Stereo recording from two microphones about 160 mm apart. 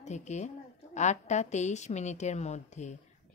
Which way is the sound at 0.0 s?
45° left (ahead or behind).